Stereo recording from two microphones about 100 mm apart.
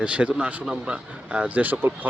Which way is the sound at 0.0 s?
10° right (ahead or behind).